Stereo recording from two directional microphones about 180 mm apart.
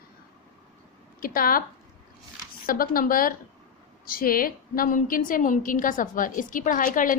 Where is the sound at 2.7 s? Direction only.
55° left (ahead or behind).